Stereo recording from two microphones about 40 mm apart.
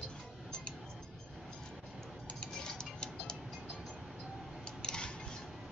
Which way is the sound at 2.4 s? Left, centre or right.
Centre.